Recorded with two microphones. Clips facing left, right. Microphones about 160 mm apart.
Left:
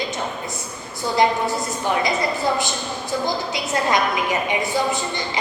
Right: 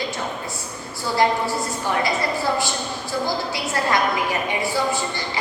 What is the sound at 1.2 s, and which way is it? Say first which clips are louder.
A woman's voice: left 1 dB; 20° left (ahead or behind).